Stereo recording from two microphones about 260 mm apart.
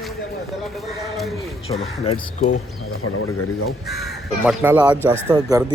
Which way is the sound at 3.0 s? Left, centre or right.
Left.